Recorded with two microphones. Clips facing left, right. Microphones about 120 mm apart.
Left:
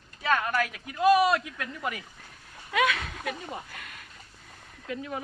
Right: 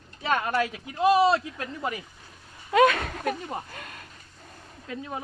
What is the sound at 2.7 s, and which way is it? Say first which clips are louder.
Speech: right 7 dB; 40° right (ahead or behind).